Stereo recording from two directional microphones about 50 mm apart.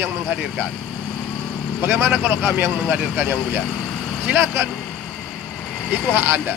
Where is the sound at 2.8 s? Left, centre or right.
Right.